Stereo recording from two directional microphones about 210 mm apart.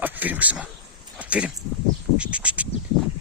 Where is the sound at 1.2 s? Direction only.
5° right (ahead or behind).